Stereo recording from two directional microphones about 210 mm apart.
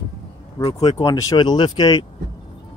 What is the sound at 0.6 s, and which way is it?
Speech, 25° left (ahead or behind).